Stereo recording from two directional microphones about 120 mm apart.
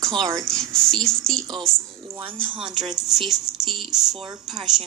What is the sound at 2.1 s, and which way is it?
Speech, 45° right (ahead or behind).